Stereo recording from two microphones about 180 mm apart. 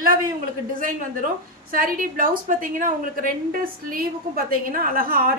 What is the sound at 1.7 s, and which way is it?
A woman's voice, 50° right (ahead or behind).